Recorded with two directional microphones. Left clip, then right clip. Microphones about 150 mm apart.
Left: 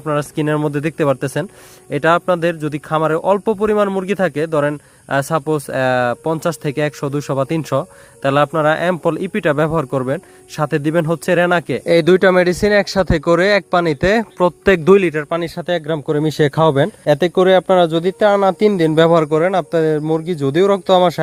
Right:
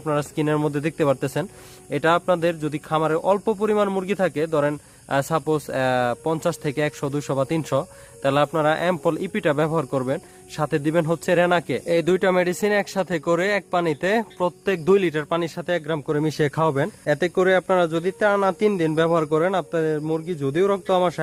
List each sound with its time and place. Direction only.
0.0 s a man's voice: 40° left (ahead or behind)
14.9 s a man's voice: 25° left (ahead or behind); by 19.2 s 40° left (ahead or behind)
19.2 s a man's voice: 25° left (ahead or behind)
19.8 s speech: 40° left (ahead or behind)